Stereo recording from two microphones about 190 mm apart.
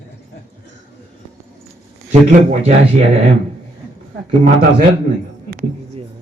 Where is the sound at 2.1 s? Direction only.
35° right (ahead or behind).